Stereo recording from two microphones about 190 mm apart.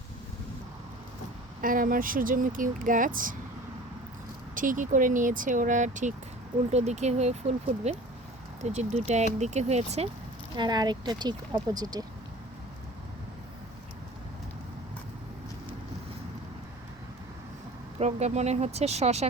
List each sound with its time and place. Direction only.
1.6 s speech: 45° right (ahead or behind)
4.5 s speech: 45° right (ahead or behind)
10.5 s speech: 20° right (ahead or behind)
18.0 s speech: 35° right (ahead or behind)